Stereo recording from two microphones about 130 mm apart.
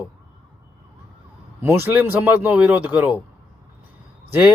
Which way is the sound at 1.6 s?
15° right (ahead or behind).